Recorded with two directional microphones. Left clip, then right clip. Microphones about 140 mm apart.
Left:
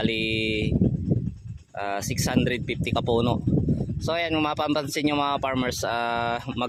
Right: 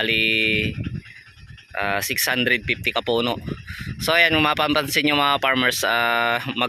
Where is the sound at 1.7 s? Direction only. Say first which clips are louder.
Right 6 dB; 10° left (ahead or behind).